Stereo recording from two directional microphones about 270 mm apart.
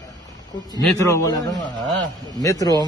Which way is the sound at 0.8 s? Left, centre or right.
Centre.